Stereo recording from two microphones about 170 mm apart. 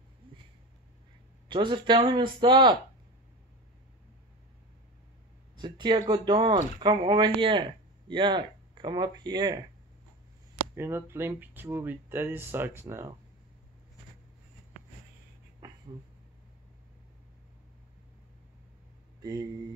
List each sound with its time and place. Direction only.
1.5 s speech: 25° right (ahead or behind)
5.6 s speech: 25° right (ahead or behind)
10.7 s speech: 15° right (ahead or behind)
15.6 s a sound: 20° right (ahead or behind)